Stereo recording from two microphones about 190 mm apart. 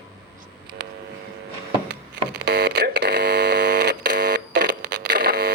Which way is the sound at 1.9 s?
65° right (ahead or behind).